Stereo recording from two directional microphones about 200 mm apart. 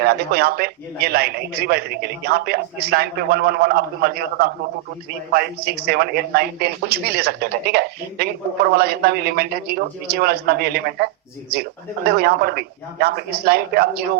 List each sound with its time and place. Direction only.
0.0 s speech: 50° right (ahead or behind)
12.1 s speech: 50° right (ahead or behind)